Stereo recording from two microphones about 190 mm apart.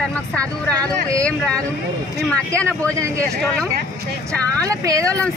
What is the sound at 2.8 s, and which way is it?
Speech, 15° right (ahead or behind).